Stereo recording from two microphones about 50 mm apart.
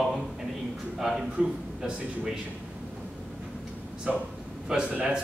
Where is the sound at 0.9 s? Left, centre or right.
Centre.